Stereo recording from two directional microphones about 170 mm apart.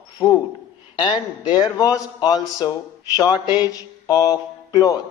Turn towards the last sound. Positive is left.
turn(degrees=20)  # may be behind; listen again after turning